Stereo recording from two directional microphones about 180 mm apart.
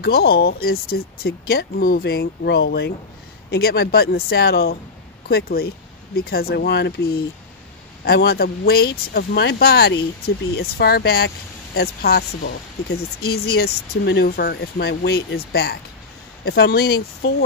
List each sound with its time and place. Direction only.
0.0 s speech: 60° left (ahead or behind)